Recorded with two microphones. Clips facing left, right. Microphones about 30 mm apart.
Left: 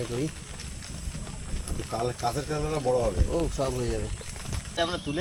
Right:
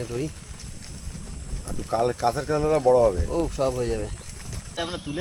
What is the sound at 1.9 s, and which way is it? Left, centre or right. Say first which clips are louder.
Speech: right 7 dB; centre.